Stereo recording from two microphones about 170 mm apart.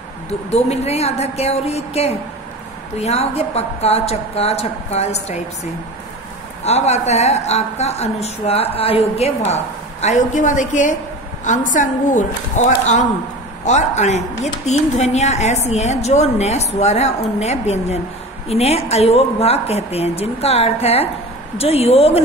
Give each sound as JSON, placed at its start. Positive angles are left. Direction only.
{"t": 0.5, "sound": "speech", "side_deg": 40}
{"t": 6.6, "sound": "a woman's voice", "side_deg": 40}